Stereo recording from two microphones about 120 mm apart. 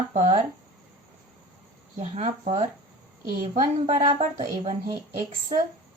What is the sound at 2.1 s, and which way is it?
Speech, 60° right (ahead or behind).